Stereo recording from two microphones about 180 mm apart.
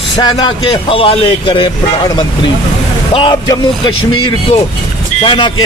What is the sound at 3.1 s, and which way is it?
A man's voice, 25° left (ahead or behind).